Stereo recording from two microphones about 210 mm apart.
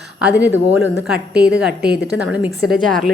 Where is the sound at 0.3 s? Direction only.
5° right (ahead or behind).